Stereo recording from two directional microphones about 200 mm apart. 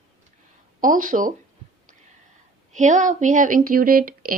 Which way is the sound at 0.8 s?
40° right (ahead or behind).